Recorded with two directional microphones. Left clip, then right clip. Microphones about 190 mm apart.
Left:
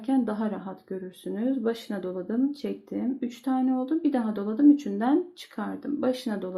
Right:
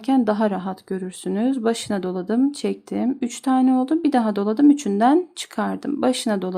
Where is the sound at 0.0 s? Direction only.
40° right (ahead or behind).